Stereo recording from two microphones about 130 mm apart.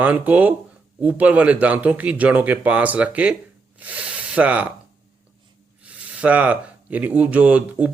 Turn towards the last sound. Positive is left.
turn(degrees=-10)  # may be behind; listen again after turning